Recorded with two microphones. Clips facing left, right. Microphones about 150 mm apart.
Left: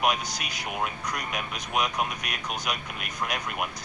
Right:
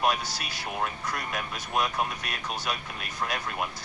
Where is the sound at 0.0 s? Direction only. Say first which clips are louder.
Even; 20° left (ahead or behind).